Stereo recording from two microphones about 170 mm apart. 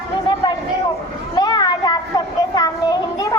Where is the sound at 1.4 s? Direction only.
25° left (ahead or behind).